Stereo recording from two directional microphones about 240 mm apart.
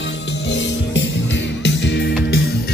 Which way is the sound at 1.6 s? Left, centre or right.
Left.